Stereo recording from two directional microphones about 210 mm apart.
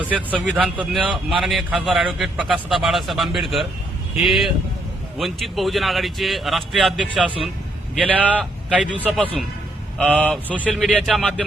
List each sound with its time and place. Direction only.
0.1 s a man's voice: 5° right (ahead or behind)